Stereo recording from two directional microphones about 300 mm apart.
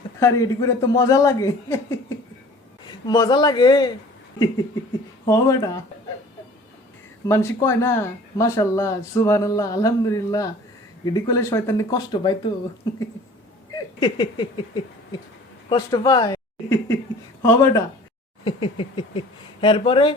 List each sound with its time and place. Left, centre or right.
0.2 s speech: centre
7.3 s speech: centre
13.7 s a sound: centre
15.7 s speech: centre